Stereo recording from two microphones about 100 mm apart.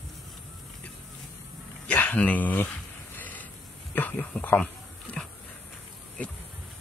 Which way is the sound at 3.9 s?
15° left (ahead or behind).